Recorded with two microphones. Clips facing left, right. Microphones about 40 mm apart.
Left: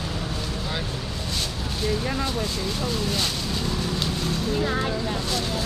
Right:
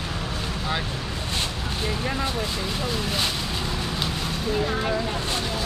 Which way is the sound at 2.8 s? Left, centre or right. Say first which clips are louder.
Even; centre.